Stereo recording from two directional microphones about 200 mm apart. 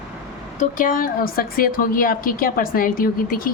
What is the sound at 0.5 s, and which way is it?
A woman's voice, 40° left (ahead or behind).